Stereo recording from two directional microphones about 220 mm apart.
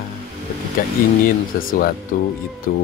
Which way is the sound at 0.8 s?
40° left (ahead or behind).